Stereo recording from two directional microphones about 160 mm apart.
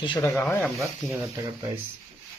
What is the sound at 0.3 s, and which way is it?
Speech, 10° left (ahead or behind).